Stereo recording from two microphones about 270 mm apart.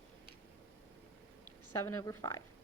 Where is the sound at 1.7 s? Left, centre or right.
Centre.